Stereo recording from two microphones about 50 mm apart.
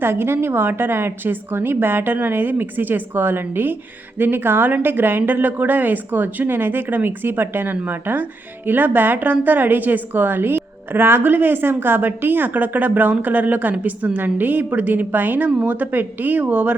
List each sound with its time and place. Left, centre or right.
0.0 s a woman's voice: right